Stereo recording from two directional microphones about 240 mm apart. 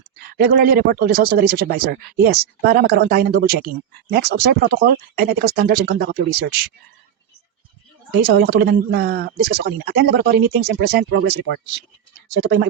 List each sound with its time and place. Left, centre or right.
0.2 s speech: right
8.3 s speech: right